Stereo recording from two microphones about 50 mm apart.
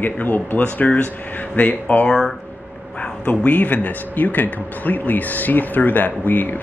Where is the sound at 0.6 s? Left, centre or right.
Left.